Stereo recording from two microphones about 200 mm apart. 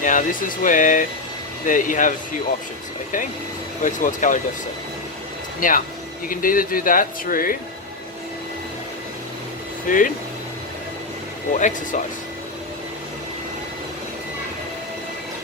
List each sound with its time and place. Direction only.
0.0 s speech: 40° left (ahead or behind)
3.8 s speech: 40° left (ahead or behind)
5.5 s speech: 45° left (ahead or behind)
9.9 s speech: 40° left (ahead or behind)
11.5 s speech: 40° left (ahead or behind)